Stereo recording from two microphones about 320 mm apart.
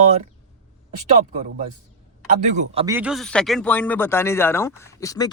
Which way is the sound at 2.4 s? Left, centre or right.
Right.